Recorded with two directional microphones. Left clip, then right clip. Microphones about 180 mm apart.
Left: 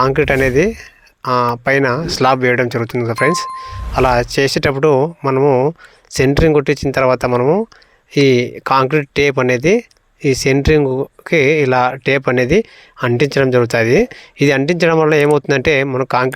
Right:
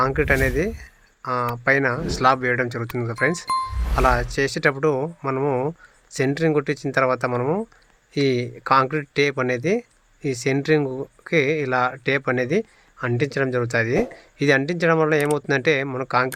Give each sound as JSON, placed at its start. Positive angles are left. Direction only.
{"t": 0.0, "sound": "speech", "side_deg": 35}